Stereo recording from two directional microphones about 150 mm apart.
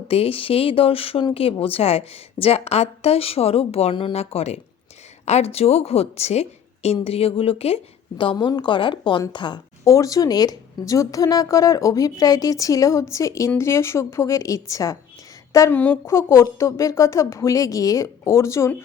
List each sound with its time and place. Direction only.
0.1 s a woman's voice: 40° left (ahead or behind)
9.8 s a woman's voice: 20° left (ahead or behind)